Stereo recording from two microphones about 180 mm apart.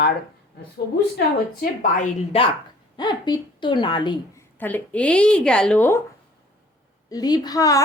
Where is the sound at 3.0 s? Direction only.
25° left (ahead or behind).